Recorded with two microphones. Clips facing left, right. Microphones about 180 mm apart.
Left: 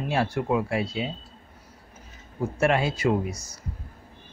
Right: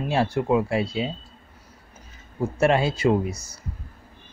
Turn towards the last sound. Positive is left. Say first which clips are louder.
# right 3 dB
turn(degrees=-30)  # may be behind; listen again after turning